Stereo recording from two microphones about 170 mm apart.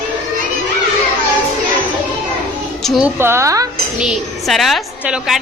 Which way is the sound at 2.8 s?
Centre (ahead or behind).